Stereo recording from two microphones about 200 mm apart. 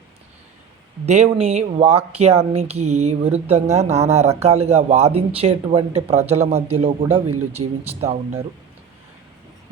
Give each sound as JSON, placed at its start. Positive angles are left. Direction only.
{"t": 1.0, "sound": "speech", "side_deg": -35}